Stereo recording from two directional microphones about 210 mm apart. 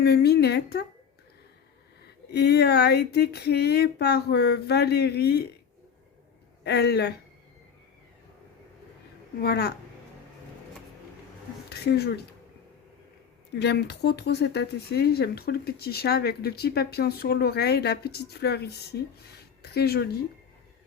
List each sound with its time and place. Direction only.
0.0 s speech: 50° left (ahead or behind)
2.3 s speech: 50° left (ahead or behind)
6.7 s speech: 50° left (ahead or behind)
9.4 s speech: 50° left (ahead or behind)
11.7 s speech: 50° left (ahead or behind)
13.6 s speech: 55° left (ahead or behind)